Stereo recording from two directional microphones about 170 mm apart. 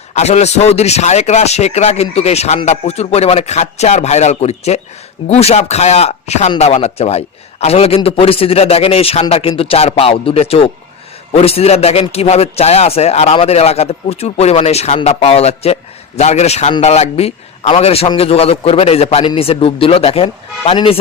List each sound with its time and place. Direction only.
0.1 s a man's voice: 40° left (ahead or behind)